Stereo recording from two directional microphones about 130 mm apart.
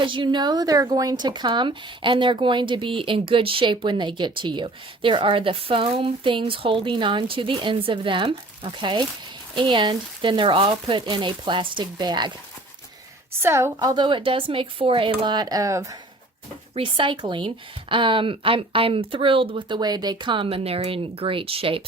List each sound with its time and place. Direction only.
0.0 s speech: 40° right (ahead or behind)
13.4 s a woman's voice: 20° right (ahead or behind)
13.7 s speech: 35° right (ahead or behind)
16.7 s speech: 40° right (ahead or behind)